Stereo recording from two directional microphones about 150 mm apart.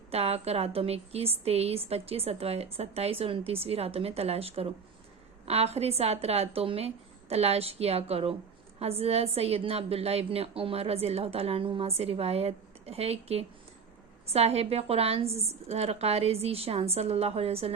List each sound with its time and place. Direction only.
0.1 s a woman's voice: 45° right (ahead or behind)